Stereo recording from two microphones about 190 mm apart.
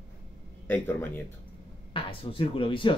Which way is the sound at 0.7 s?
10° left (ahead or behind).